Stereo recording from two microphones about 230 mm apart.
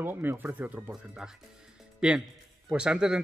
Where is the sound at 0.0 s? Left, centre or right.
Centre.